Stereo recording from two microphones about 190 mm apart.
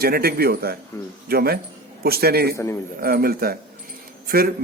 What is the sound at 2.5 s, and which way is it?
Speech, 15° left (ahead or behind).